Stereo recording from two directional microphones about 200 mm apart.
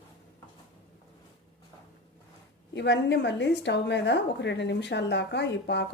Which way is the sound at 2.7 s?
60° left (ahead or behind).